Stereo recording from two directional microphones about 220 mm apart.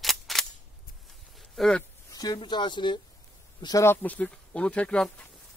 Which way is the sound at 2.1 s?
15° left (ahead or behind).